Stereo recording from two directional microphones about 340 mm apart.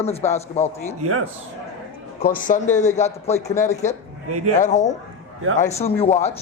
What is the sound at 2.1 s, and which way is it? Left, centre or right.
A man's voice, left.